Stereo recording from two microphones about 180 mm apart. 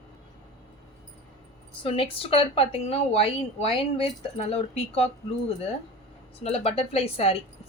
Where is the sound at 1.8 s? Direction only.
30° left (ahead or behind).